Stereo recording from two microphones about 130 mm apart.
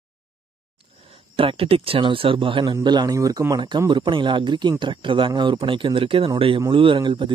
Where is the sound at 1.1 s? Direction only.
45° right (ahead or behind).